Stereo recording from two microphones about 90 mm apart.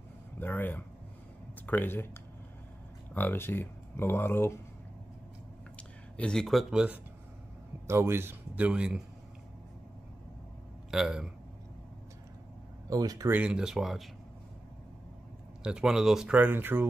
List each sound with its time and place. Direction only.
0.4 s speech: 20° left (ahead or behind)
3.2 s speech: 25° left (ahead or behind)
5.8 s a sound: 10° left (ahead or behind)
6.7 s speech: 10° right (ahead or behind)
7.8 s speech: 30° right (ahead or behind)
8.6 s speech: 10° right (ahead or behind)
10.9 s speech: 5° right (ahead or behind)
12.9 s speech: 40° right (ahead or behind)
13.3 s speech: 10° right (ahead or behind)
15.6 s speech: 5° right (ahead or behind)
16.3 s speech: 20° right (ahead or behind)